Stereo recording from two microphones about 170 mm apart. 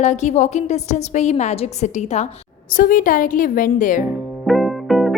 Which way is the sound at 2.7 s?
55° left (ahead or behind).